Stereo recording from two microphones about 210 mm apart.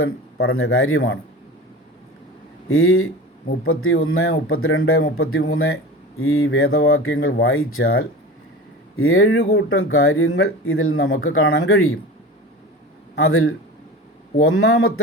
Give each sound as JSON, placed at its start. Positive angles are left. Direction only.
{"t": 0.0, "sound": "a man's voice", "side_deg": 75}
{"t": 2.6, "sound": "a man's voice", "side_deg": 75}
{"t": 9.4, "sound": "speech", "side_deg": 50}
{"t": 9.6, "sound": "speech", "side_deg": 80}
{"t": 13.1, "sound": "speech", "side_deg": 80}